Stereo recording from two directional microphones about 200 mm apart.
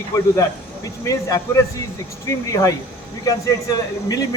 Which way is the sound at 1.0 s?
15° left (ahead or behind).